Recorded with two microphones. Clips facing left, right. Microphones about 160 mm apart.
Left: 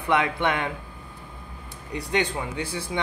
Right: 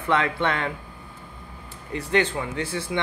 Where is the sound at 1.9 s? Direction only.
15° left (ahead or behind).